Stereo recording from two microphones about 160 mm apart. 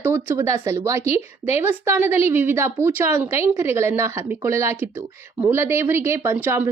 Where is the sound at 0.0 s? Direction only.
15° right (ahead or behind).